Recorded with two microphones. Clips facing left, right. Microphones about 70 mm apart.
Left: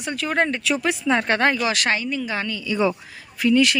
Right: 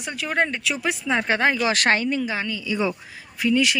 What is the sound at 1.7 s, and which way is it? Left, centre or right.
Speech, right.